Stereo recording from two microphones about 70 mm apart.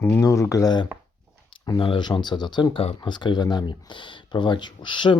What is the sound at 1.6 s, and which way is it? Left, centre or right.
Speech, left.